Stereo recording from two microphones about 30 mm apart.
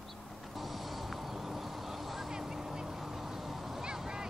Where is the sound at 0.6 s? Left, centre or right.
Centre.